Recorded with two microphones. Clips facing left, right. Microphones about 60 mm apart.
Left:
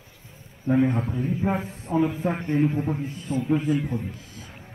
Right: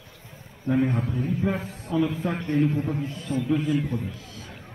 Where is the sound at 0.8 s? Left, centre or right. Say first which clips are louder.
Left 2 dB; left.